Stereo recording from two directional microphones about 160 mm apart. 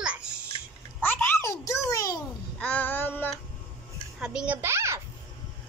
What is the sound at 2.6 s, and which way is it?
Child singing, 10° left (ahead or behind).